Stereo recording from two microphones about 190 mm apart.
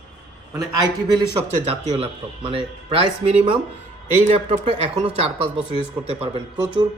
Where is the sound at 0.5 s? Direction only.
20° right (ahead or behind).